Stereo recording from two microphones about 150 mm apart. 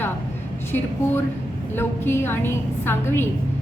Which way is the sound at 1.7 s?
15° left (ahead or behind).